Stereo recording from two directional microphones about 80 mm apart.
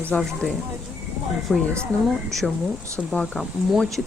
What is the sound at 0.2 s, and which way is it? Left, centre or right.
Speech, centre.